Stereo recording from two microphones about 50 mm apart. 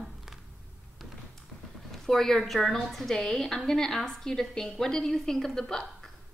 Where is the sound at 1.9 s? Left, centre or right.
Centre.